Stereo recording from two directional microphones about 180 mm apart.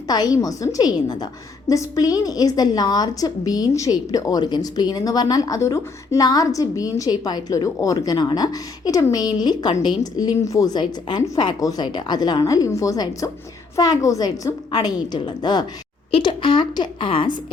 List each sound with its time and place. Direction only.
0.1 s a woman's voice: 20° left (ahead or behind)